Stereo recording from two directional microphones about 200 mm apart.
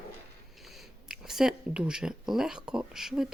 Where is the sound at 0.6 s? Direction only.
Centre (ahead or behind).